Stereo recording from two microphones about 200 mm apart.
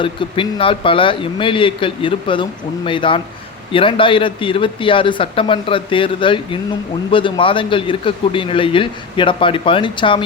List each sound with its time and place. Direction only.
0.0 s a man's voice: 25° left (ahead or behind)